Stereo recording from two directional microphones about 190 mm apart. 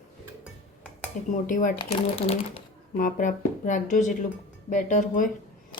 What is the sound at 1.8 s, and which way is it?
Speech, 30° left (ahead or behind).